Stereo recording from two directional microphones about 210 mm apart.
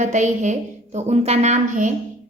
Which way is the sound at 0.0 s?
35° right (ahead or behind).